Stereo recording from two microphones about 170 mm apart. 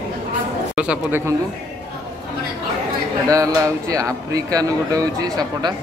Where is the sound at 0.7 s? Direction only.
5° right (ahead or behind).